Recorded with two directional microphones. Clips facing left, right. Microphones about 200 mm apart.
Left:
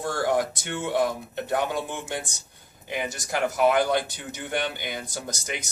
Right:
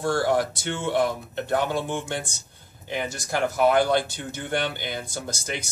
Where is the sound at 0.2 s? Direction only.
15° left (ahead or behind).